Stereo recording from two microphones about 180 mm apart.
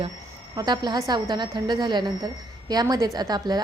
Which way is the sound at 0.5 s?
25° right (ahead or behind).